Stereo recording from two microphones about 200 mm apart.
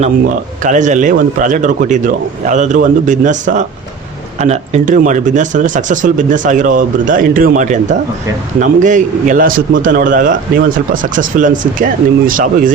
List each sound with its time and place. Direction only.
0.0 s speech: 40° right (ahead or behind)